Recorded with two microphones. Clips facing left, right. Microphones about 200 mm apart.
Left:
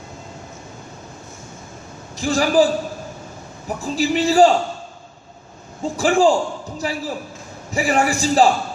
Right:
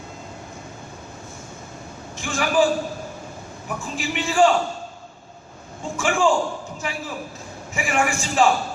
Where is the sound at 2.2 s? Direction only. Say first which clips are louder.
Left 4 dB; 35° left (ahead or behind).